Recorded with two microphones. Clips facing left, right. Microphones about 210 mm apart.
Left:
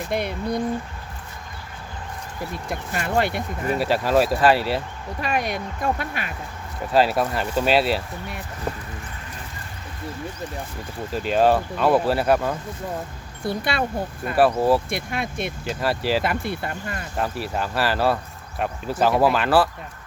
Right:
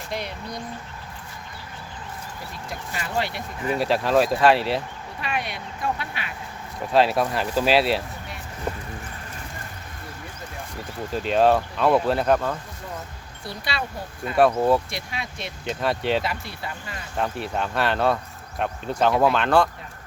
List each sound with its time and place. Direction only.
0.1 s speech: 55° left (ahead or behind)
2.6 s speech: 50° left (ahead or behind)
3.8 s speech: centre (ahead or behind)
5.2 s speech: 45° left (ahead or behind)
6.9 s speech: centre (ahead or behind)
11.1 s speech: centre (ahead or behind)
13.4 s speech: 50° left (ahead or behind)
14.3 s speech: 5° left (ahead or behind)
14.8 s speech: 55° left (ahead or behind)
15.6 s speech: centre (ahead or behind)
16.2 s speech: 55° left (ahead or behind)
17.2 s speech: 5° left (ahead or behind)